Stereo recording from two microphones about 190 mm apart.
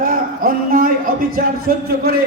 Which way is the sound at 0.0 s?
50° right (ahead or behind).